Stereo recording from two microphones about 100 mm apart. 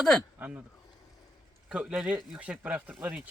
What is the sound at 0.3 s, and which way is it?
Speech, 15° right (ahead or behind).